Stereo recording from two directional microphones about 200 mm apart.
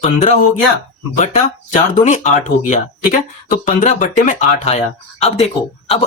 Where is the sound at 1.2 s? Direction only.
35° left (ahead or behind).